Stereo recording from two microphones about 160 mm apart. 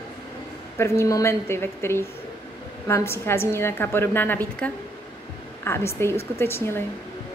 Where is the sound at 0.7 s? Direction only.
15° left (ahead or behind).